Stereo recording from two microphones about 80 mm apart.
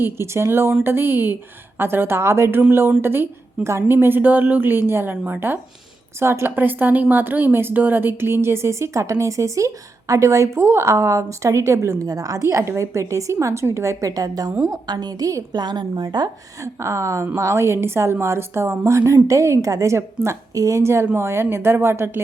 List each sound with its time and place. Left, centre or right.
0.0 s a woman's voice: right
14.7 s a woman's voice: right
15.5 s a woman's voice: right
16.8 s a woman's voice: right